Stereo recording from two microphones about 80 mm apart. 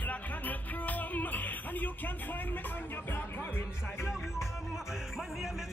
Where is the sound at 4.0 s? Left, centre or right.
Centre.